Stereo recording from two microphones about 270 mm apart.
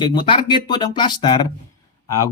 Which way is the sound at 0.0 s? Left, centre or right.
Centre.